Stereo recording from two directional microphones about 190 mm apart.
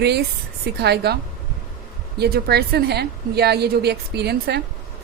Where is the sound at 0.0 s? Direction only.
60° right (ahead or behind).